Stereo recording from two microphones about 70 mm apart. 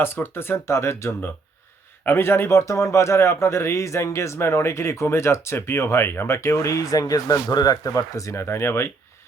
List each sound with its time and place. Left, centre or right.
0.0 s speech: left